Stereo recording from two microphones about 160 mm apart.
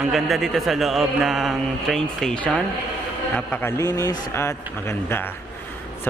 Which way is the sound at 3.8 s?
20° left (ahead or behind).